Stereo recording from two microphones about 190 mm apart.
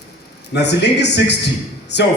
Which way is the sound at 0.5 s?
65° left (ahead or behind).